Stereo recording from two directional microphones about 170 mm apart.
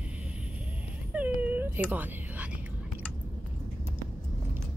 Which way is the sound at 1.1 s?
10° right (ahead or behind).